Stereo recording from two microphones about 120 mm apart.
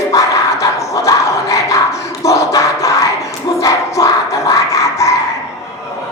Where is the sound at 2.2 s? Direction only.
25° left (ahead or behind).